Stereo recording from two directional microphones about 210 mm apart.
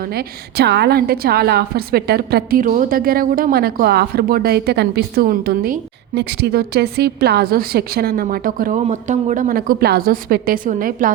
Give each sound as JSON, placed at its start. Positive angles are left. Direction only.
{"t": 0.1, "sound": "a woman's voice", "side_deg": -50}